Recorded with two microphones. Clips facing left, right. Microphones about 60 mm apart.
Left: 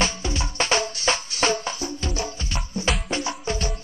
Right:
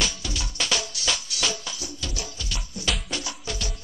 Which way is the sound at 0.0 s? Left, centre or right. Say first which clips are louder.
Left 5 dB; left.